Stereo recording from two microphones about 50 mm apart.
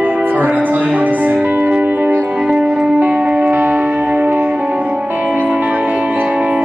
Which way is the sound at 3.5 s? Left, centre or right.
Right.